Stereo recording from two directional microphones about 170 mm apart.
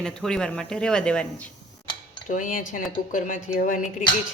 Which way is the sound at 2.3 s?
50° left (ahead or behind).